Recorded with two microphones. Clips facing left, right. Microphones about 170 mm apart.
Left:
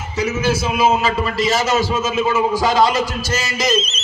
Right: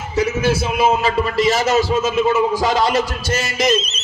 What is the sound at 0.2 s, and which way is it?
A man's voice, 55° right (ahead or behind).